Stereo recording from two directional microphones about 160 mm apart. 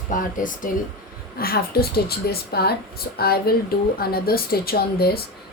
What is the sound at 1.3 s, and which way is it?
A woman's voice, 70° left (ahead or behind).